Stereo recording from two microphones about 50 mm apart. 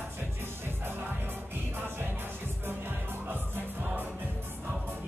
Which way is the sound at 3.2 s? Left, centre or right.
Right.